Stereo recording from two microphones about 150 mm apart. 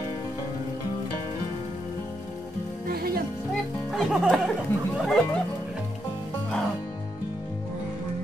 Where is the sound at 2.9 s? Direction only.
85° right.